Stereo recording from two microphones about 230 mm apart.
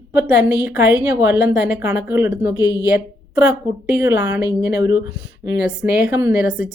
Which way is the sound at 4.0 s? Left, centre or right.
Centre.